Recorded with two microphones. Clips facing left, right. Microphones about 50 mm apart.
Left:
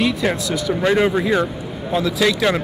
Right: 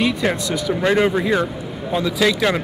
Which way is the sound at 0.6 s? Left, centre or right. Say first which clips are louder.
Even; centre.